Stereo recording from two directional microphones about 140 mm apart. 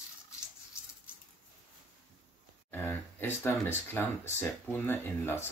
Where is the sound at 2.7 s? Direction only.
15° left (ahead or behind).